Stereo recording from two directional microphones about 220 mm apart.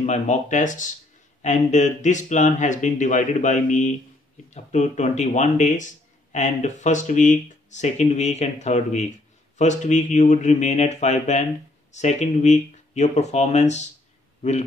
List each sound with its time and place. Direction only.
0.0 s speech: 30° left (ahead or behind)